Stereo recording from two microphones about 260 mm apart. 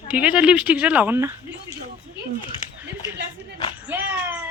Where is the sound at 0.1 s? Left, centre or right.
Centre.